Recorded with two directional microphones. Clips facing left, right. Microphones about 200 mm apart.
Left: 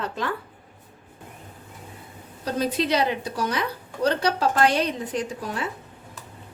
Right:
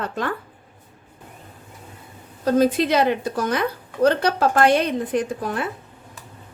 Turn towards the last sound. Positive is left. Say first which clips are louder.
# right 5 dB
turn(degrees=-55)  # may be behind; listen again after turning